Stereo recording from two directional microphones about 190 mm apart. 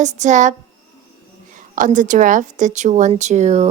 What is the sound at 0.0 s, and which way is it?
Speech, 40° right (ahead or behind).